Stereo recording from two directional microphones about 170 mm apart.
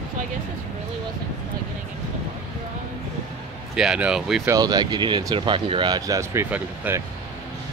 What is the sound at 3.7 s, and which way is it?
Speech, 5° right (ahead or behind).